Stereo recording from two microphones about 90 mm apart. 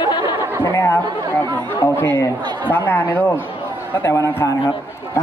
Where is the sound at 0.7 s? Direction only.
25° left (ahead or behind).